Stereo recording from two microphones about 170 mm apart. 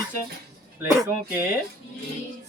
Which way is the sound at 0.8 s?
15° right (ahead or behind).